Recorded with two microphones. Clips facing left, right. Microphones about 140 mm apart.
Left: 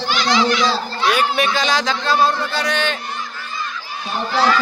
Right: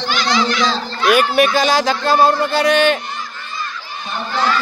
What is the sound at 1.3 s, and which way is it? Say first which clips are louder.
Speech: right 5 dB; 50° right (ahead or behind).